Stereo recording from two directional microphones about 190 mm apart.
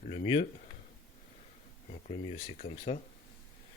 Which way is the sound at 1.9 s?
35° left (ahead or behind).